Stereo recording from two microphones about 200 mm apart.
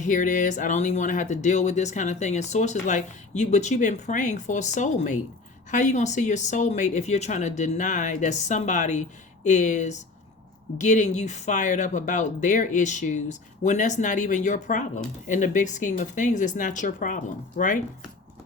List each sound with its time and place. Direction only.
0.0 s speech: 40° left (ahead or behind)